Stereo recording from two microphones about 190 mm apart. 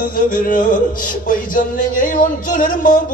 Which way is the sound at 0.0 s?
45° left (ahead or behind).